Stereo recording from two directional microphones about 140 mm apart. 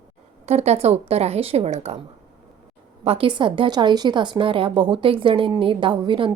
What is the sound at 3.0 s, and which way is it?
A woman's voice, 40° right (ahead or behind).